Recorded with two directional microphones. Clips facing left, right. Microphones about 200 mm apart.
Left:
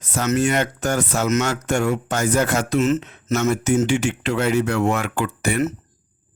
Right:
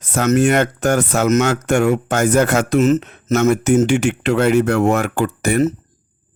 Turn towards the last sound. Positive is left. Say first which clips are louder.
# right 5 dB
turn(degrees=-40)  # may be behind; listen again after turning